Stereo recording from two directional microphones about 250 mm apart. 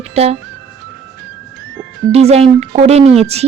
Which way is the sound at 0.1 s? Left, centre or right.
Right.